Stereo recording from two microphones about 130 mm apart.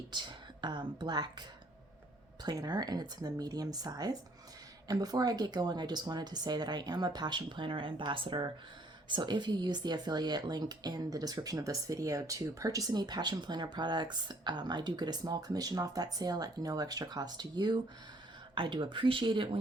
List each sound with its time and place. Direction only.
0.1 s speech: 35° right (ahead or behind)